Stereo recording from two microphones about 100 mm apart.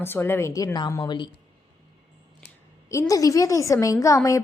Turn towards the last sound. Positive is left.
turn(degrees=35)  # may be behind; listen again after turning